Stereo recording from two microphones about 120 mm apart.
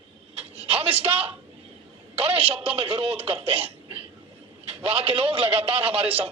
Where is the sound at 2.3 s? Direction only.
50° right (ahead or behind).